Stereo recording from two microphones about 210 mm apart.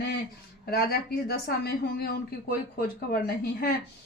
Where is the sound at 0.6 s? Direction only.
45° left (ahead or behind).